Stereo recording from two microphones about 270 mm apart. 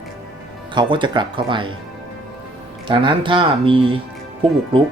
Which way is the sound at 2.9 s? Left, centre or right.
Centre.